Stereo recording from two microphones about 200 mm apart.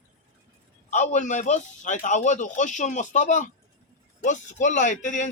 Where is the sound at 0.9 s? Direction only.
35° left (ahead or behind).